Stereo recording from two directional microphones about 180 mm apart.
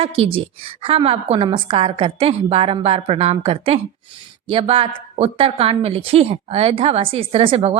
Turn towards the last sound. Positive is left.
turn(degrees=-35)  # may be behind; listen again after turning